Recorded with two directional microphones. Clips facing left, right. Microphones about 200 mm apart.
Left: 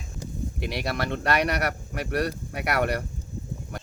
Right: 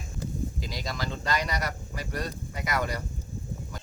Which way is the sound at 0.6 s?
65° left (ahead or behind).